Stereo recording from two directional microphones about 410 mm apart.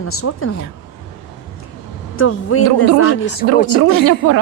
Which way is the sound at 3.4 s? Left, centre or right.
Left.